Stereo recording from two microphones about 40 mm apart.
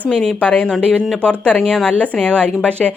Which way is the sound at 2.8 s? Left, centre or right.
Centre.